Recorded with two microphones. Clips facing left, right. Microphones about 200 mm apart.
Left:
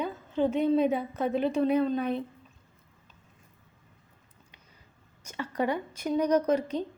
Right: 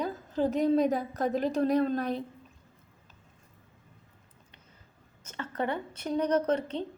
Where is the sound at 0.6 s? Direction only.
40° right (ahead or behind).